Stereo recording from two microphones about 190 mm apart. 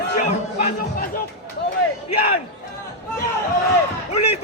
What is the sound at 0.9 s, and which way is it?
Speech, 50° left (ahead or behind).